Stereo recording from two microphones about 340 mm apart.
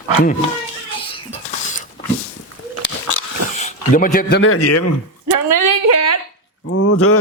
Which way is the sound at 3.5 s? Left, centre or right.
Left.